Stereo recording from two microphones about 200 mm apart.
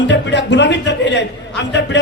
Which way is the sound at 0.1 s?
60° left (ahead or behind).